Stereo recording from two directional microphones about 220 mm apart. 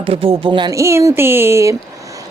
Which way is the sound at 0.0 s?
25° right (ahead or behind).